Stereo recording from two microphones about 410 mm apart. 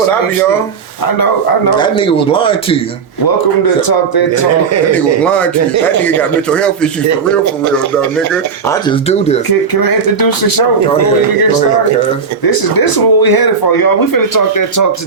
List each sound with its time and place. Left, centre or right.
1.8 s speech: centre
3.8 s speech: left
5.2 s speech: centre
7.1 s speech: right
8.3 s speech: centre
9.8 s speech: left
12.5 s speech: left